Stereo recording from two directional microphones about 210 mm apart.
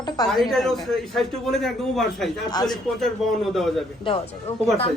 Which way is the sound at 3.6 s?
Centre (ahead or behind).